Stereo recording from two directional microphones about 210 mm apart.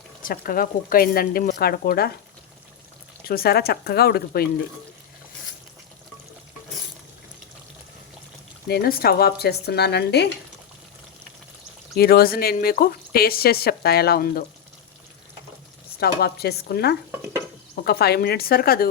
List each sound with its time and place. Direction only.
0.2 s speech: 40° left (ahead or behind)
3.2 s speech: 45° left (ahead or behind)
8.6 s speech: 45° left (ahead or behind)
11.9 s speech: 45° left (ahead or behind)
16.0 s speech: 50° left (ahead or behind)